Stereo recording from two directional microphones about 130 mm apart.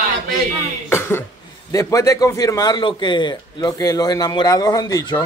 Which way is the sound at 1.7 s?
25° left (ahead or behind).